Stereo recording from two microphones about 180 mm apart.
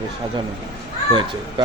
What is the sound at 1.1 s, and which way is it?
Speech, 25° right (ahead or behind).